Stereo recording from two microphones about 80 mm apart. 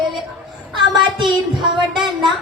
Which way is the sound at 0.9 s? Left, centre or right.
Right.